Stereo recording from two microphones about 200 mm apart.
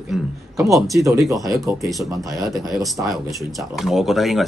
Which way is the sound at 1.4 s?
15° right (ahead or behind).